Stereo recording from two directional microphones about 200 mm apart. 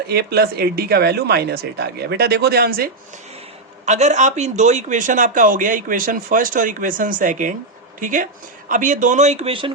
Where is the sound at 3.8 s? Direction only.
35° right (ahead or behind).